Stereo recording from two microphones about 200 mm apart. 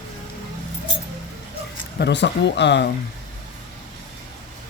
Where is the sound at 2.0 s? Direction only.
60° left (ahead or behind).